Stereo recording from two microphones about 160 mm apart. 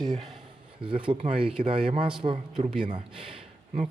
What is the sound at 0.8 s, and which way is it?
Speech, 30° right (ahead or behind).